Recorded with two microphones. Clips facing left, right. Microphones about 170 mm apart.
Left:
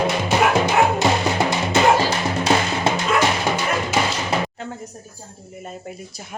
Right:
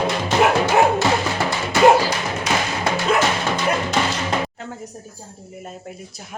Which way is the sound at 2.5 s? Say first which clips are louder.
Left 3 dB; 30° left (ahead or behind).